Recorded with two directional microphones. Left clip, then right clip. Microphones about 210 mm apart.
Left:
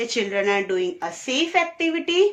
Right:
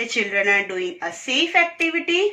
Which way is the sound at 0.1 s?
50° left (ahead or behind).